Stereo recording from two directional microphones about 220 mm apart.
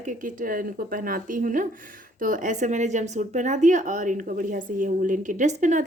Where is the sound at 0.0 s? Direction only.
35° right (ahead or behind).